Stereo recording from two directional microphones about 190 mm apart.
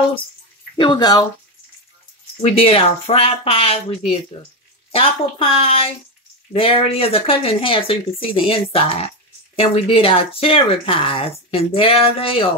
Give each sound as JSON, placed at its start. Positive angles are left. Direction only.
{"t": 0.7, "sound": "speech", "side_deg": 20}
{"t": 2.4, "sound": "speech", "side_deg": 30}